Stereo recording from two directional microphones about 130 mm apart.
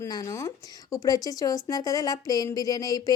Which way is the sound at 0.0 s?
25° left (ahead or behind).